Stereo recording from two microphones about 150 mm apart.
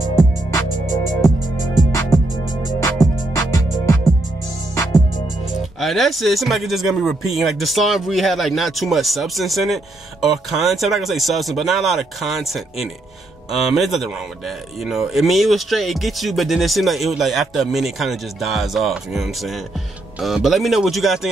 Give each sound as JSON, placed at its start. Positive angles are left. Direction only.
{"t": 0.5, "sound": "music", "side_deg": 20}
{"t": 3.3, "sound": "music", "side_deg": 20}
{"t": 5.8, "sound": "speech", "side_deg": 0}